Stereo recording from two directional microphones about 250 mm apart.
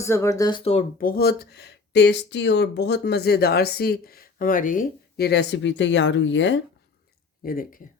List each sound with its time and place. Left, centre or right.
0.0 s speech: centre; by 6.6 s left
7.4 s speech: left